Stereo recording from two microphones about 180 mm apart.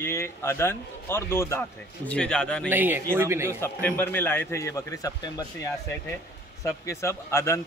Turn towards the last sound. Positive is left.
turn(degrees=15)  # may be behind; listen again after turning